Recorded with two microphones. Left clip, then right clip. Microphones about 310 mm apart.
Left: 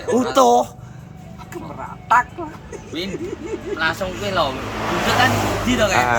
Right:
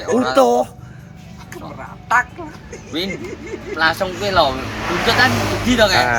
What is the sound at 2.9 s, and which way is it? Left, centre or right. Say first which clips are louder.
Speech: right 4 dB; centre.